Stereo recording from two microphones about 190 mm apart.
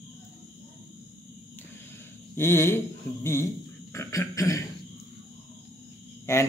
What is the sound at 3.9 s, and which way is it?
Speech, 15° left (ahead or behind).